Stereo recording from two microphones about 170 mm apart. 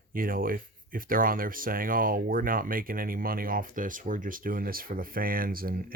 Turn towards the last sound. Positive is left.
turn(degrees=-60)  # may be behind; listen again after turning